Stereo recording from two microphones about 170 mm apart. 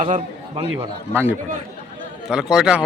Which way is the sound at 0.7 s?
15° right (ahead or behind).